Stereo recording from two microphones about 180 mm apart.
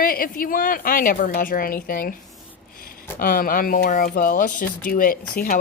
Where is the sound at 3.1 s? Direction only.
50° left (ahead or behind).